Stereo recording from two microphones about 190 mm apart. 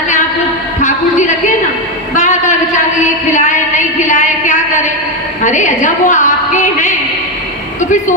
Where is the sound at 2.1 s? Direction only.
40° left (ahead or behind).